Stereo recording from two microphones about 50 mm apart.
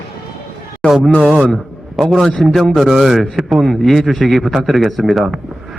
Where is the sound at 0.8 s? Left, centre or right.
Left.